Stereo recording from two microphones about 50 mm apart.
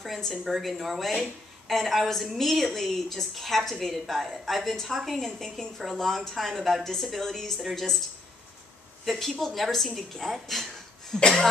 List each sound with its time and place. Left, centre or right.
0.0 s speech: centre
9.0 s a woman's voice: centre
11.1 s speech: centre